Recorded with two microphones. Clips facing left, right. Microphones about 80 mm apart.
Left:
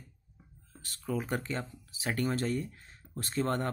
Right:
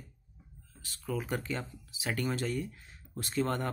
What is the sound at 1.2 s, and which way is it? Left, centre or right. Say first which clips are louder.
Speech: left 1 dB; left.